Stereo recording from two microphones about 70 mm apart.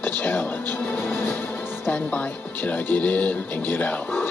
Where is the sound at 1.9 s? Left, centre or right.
Left.